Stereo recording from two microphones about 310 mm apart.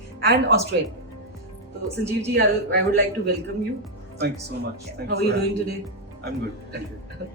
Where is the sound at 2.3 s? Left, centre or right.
Right.